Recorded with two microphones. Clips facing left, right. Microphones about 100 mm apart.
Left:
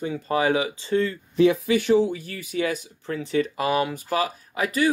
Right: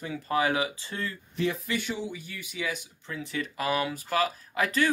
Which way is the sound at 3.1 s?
35° left (ahead or behind).